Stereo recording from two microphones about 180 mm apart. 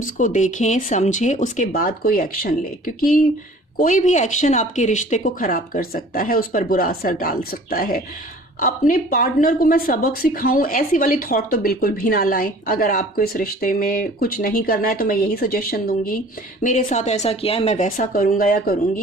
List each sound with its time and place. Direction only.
0.2 s speech: 45° left (ahead or behind)
16.6 s speech: 45° left (ahead or behind)